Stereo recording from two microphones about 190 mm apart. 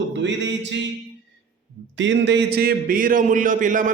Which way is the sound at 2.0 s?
70° right (ahead or behind).